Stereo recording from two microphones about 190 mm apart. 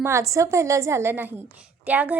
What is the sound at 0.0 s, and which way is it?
A woman's voice, 15° right (ahead or behind).